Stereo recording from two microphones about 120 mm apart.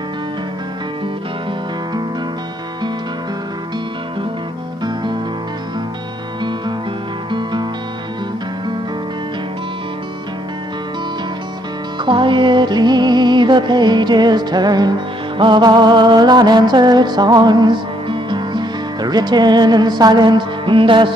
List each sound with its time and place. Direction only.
4.8 s music: 40° right (ahead or behind)
7.2 s music: 40° right (ahead or behind)
12.0 s music: 40° right (ahead or behind)